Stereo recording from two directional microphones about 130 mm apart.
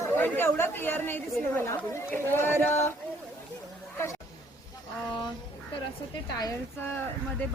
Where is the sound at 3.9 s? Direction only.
20° left (ahead or behind).